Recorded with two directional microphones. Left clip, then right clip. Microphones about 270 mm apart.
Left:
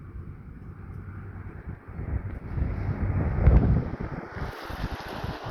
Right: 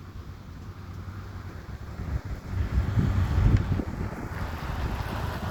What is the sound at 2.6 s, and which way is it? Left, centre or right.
Boat, right.